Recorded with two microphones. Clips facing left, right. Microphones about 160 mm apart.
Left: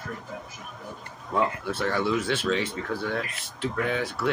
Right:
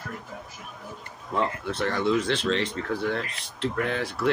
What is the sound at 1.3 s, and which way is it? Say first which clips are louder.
Speech: left 1 dB; 5° left (ahead or behind).